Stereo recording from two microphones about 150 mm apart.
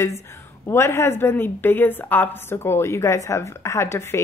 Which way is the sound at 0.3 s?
15° left (ahead or behind).